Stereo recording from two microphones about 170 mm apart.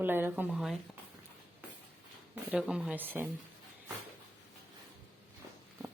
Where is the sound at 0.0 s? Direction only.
10° right (ahead or behind).